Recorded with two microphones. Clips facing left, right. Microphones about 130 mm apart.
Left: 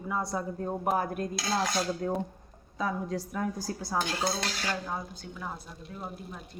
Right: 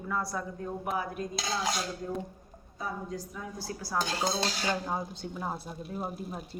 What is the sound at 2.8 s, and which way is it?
Speech, 85° left.